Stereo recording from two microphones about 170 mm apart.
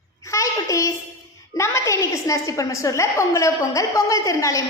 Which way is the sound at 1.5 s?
15° left (ahead or behind).